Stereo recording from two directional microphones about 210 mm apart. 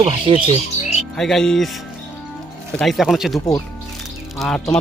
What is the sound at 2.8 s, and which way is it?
Speech, centre (ahead or behind).